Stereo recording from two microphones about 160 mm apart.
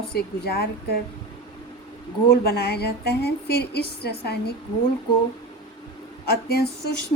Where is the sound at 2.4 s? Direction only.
85° left.